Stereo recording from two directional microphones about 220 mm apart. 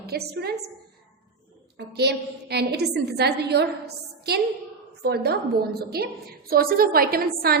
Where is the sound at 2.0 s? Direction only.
50° right (ahead or behind).